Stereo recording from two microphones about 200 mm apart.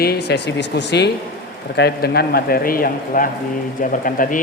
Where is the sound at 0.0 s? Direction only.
55° left (ahead or behind).